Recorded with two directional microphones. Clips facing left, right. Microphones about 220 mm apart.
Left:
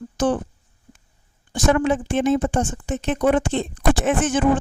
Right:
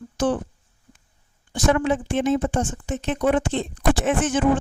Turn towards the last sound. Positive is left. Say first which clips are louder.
# left 1 dB
turn(degrees=50)  # may be behind; listen again after turning